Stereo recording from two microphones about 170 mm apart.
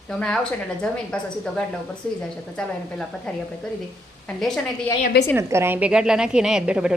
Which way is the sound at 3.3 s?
5° left (ahead or behind).